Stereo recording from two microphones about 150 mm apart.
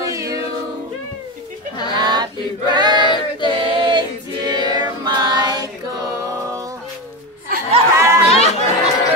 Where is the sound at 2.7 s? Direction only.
30° right (ahead or behind).